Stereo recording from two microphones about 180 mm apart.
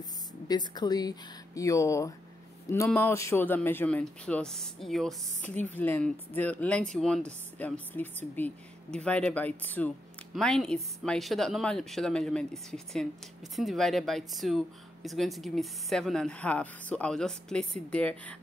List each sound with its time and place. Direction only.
0.5 s a woman's voice: 20° left (ahead or behind); by 18.3 s 5° left (ahead or behind)